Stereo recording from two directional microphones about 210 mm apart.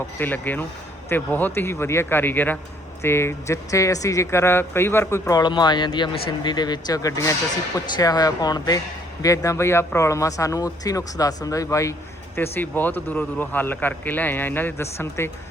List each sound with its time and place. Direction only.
0.2 s speech: 10° left (ahead or behind)